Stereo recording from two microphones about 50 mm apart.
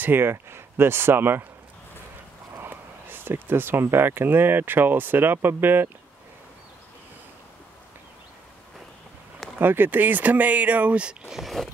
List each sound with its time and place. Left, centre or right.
0.0 s speech: right
2.5 s speech: right
9.6 s speech: right
11.2 s speech: centre